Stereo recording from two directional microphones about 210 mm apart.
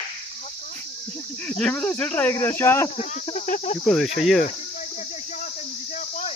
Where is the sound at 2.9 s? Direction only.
35° left (ahead or behind).